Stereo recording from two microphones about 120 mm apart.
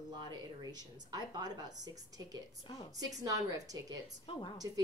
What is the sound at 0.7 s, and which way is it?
A woman's voice, 35° right (ahead or behind).